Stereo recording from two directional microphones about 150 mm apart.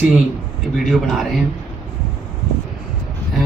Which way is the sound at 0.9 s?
Centre (ahead or behind).